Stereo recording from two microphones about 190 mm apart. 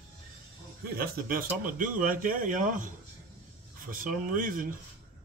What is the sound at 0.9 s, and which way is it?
Speech, 50° right (ahead or behind).